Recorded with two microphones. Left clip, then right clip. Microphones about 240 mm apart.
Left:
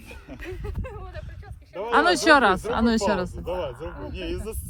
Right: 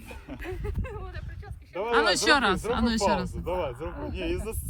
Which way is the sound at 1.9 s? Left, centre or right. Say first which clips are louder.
Left 5 dB; centre.